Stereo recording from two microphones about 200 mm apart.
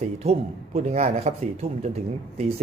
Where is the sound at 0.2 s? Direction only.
30° right (ahead or behind).